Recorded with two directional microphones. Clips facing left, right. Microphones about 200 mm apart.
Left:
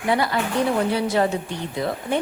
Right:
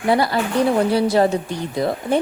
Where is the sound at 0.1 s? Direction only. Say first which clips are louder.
Right 4 dB; 35° right (ahead or behind).